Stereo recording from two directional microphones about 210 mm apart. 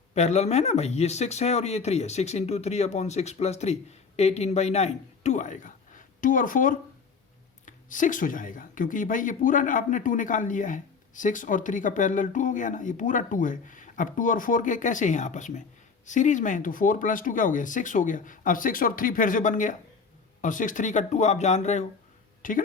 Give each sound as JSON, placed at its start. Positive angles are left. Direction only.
{"t": 0.1, "sound": "speech", "side_deg": 30}